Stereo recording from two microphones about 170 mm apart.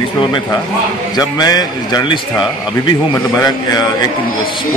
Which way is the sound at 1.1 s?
25° left (ahead or behind).